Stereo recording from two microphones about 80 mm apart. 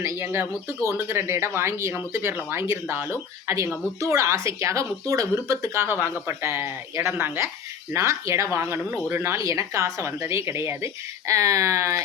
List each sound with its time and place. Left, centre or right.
0.0 s speech: right
7.1 s speech: right
7.9 s speech: right